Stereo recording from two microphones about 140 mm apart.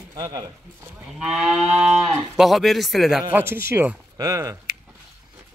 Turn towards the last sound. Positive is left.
turn(degrees=-25)  # may be behind; listen again after turning